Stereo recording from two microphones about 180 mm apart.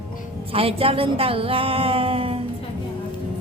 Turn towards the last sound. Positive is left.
turn(degrees=-30)  # may be behind; listen again after turning